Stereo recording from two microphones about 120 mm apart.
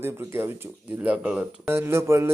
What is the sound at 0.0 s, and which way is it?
Speech, 20° right (ahead or behind).